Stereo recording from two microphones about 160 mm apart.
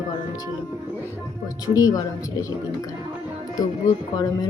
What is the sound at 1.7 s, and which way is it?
Speech, 20° left (ahead or behind).